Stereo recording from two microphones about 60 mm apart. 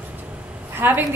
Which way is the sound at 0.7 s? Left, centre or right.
Right.